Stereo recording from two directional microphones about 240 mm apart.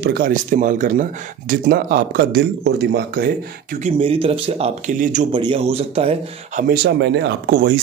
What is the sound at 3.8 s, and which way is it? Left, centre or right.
Speech, right.